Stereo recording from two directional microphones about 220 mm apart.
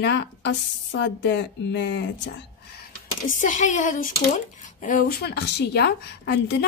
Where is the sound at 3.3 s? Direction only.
35° left (ahead or behind).